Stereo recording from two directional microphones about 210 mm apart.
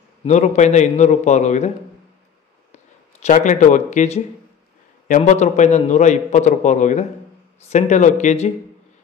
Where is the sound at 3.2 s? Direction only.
35° left (ahead or behind).